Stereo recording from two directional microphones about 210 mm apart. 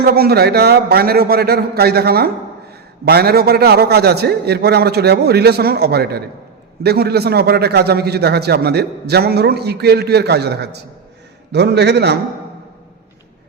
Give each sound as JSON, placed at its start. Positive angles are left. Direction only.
{"t": 0.0, "sound": "a man's voice", "side_deg": -45}